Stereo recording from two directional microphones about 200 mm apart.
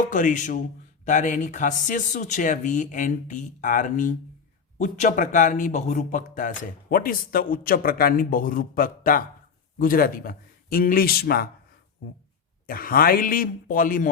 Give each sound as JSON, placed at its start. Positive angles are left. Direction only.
{"t": 0.1, "sound": "speech", "side_deg": 40}
{"t": 12.6, "sound": "speech", "side_deg": 45}